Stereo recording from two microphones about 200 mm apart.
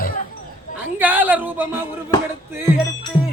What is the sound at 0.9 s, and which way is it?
Speech, 10° right (ahead or behind).